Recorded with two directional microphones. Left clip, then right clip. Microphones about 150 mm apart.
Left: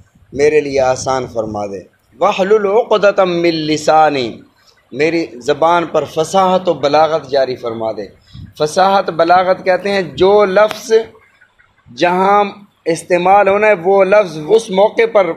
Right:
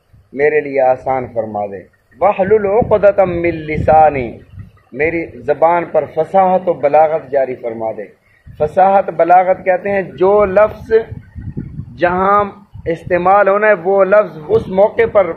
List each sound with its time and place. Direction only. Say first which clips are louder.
0.4 s a man's voice: left 1 dB; 50° left (ahead or behind)
2.1 s speech: even; 45° left (ahead or behind)